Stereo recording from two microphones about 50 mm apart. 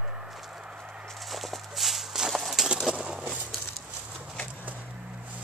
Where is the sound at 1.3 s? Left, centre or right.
Centre.